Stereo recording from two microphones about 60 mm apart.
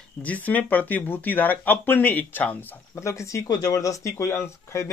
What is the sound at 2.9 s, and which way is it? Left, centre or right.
Speech, left.